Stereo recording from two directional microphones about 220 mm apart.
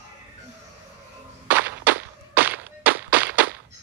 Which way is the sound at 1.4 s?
10° right (ahead or behind).